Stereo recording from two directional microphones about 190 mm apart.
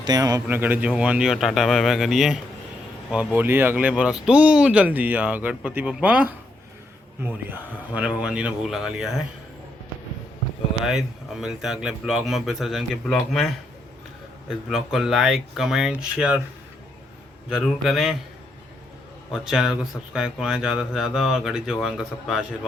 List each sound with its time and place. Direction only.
0.0 s a man's voice: 20° right (ahead or behind); by 9.2 s centre (ahead or behind)
10.8 s speech: centre (ahead or behind)
14.7 s speech: centre (ahead or behind)
17.5 s speech: centre (ahead or behind)
19.3 s speech: 5° right (ahead or behind)